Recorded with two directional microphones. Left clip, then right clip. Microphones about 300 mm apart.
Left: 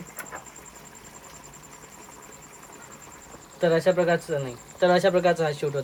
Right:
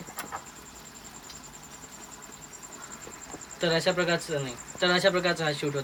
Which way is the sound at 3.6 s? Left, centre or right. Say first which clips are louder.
Left 5 dB; centre.